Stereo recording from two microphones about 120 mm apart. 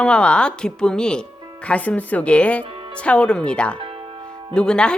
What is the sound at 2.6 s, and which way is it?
Music, 50° right (ahead or behind).